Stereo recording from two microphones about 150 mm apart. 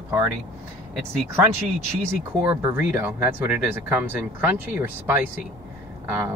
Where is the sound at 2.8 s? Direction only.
15° right (ahead or behind).